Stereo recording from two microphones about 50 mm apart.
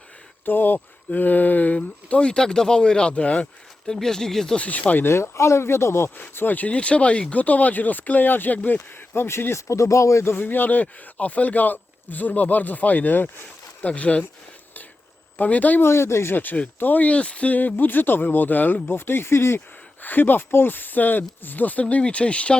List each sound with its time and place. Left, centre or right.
0.4 s speech: left
3.4 s speech: centre
4.5 s speech: left
5.0 s speech: left
6.1 s speech: left
6.7 s speech: left
8.8 s speech: left
10.3 s speech: left
13.8 s speech: left
15.4 s speech: left
15.8 s speech: left
16.3 s speech: left
19.5 s speech: left